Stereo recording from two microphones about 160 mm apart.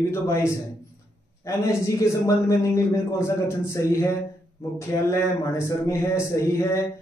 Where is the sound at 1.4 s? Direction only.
20° left (ahead or behind).